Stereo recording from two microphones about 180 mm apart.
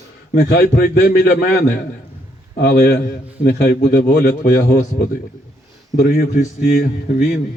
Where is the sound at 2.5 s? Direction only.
65° left (ahead or behind).